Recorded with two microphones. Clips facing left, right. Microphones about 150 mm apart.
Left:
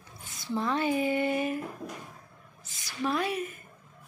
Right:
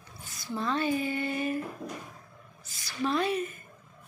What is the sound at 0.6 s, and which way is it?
Speech, 15° left (ahead or behind).